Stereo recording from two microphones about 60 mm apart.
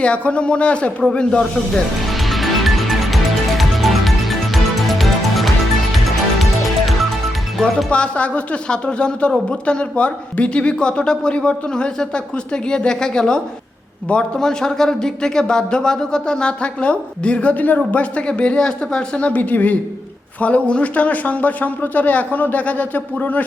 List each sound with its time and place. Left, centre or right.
0.0 s a man's voice: left
2.3 s music: centre
7.9 s a man's voice: centre